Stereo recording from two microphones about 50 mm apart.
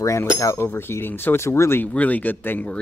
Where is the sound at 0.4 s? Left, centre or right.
Left.